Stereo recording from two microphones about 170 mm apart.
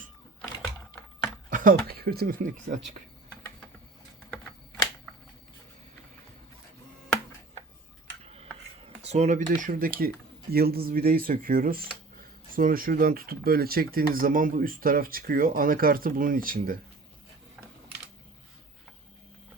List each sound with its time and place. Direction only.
1.5 s a sound: 50° right (ahead or behind)
1.9 s speech: 65° right (ahead or behind)
8.2 s tick-tock: 35° right (ahead or behind)
9.0 s speech: 40° right (ahead or behind); by 16.7 s 55° right (ahead or behind)